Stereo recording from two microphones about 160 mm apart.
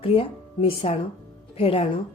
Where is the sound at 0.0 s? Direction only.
35° left (ahead or behind).